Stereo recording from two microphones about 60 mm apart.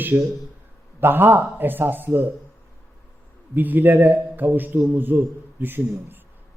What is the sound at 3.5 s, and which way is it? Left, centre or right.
Speech, right.